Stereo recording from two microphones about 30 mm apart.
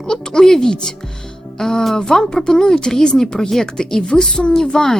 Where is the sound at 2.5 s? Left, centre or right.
Centre.